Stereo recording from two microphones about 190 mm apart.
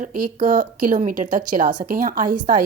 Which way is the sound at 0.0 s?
45° right (ahead or behind).